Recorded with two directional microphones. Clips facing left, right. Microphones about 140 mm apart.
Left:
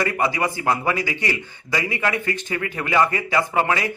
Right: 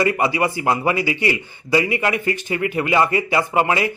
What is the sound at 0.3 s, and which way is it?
A man's voice, 20° right (ahead or behind).